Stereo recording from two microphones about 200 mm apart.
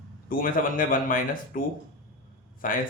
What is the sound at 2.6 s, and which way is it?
Speech, 45° left (ahead or behind).